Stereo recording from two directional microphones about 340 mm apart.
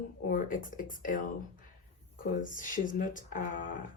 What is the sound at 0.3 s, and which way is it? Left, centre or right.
Speech, left.